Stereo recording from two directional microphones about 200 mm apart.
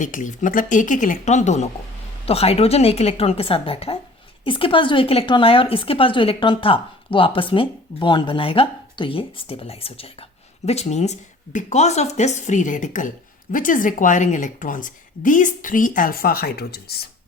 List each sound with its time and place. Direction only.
0.0 s a woman's voice: 40° left (ahead or behind)